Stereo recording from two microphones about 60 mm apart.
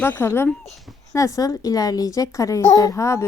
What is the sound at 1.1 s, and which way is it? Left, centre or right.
A woman's voice, left.